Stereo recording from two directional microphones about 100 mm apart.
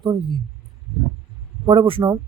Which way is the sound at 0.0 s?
60° right (ahead or behind).